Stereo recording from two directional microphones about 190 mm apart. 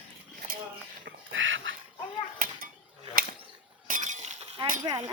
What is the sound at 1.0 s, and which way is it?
Duck, 90° right.